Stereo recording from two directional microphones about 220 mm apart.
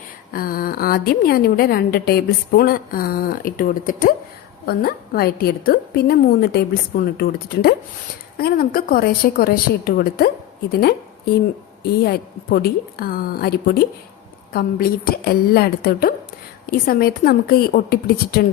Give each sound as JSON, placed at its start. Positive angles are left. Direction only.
{"t": 0.3, "sound": "a woman's voice", "side_deg": 40}